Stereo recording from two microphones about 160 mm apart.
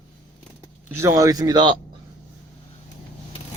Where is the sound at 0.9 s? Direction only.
15° right (ahead or behind).